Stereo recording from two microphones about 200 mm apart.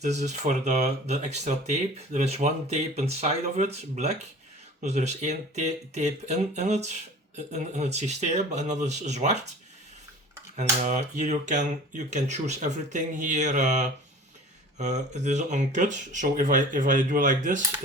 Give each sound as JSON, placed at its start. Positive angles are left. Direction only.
{"t": 0.0, "sound": "speech", "side_deg": -35}
{"t": 10.6, "sound": "speech", "side_deg": -35}